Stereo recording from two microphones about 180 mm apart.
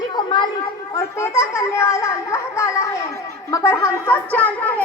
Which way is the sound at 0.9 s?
15° left (ahead or behind).